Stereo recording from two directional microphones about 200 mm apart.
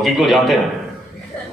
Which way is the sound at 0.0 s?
Centre (ahead or behind).